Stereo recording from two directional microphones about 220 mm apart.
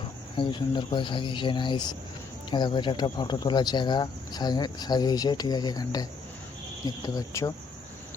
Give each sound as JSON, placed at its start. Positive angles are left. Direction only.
{"t": 0.3, "sound": "speech", "side_deg": 20}